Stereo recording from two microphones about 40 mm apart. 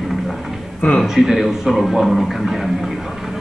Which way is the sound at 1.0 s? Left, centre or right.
Centre.